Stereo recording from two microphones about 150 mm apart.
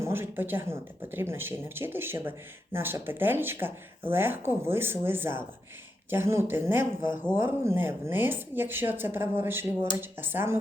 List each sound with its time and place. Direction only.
0.0 s speech: 15° right (ahead or behind)